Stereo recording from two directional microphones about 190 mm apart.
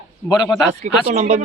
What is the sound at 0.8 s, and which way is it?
Speech, 35° right (ahead or behind).